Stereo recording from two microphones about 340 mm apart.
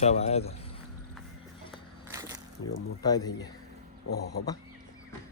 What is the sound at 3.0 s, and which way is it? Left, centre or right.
Speech, centre.